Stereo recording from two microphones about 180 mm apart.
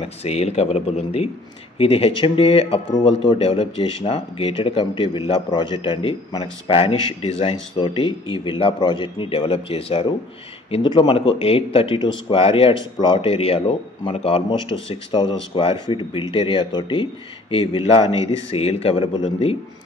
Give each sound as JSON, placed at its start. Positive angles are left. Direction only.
{"t": 0.0, "sound": "a man's voice", "side_deg": 35}